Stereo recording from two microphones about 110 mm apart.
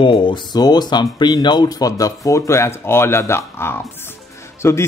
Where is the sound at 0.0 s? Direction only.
50° left (ahead or behind).